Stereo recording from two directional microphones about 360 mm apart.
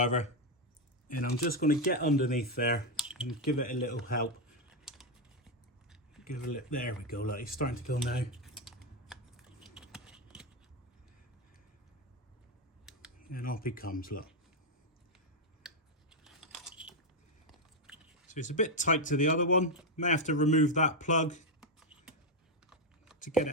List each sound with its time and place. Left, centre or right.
0.0 s speech: centre
3.0 s typing: centre
3.4 s speech: left
6.2 s speech: left
8.4 s typing: centre
13.1 s speech: left
15.6 s a sound: centre
17.4 s biting: centre
18.3 s speech: left
21.8 s typing: centre